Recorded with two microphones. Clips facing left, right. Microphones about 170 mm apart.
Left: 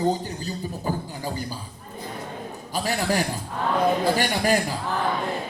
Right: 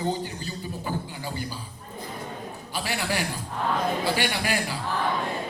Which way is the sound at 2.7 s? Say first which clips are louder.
Left 5 dB; 40° left (ahead or behind).